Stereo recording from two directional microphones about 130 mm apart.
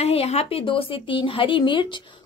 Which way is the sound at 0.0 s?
50° left (ahead or behind).